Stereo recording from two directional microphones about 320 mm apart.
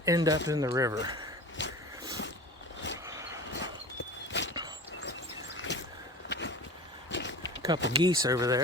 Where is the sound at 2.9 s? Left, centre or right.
Centre.